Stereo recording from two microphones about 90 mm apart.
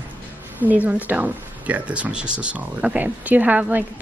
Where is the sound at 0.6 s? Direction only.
20° right (ahead or behind).